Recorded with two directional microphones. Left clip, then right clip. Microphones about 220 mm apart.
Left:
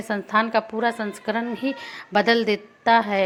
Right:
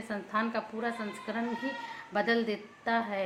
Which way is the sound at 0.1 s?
40° left (ahead or behind).